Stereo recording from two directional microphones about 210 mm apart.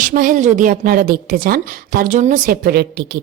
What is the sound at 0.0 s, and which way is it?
A woman's voice, 40° right (ahead or behind).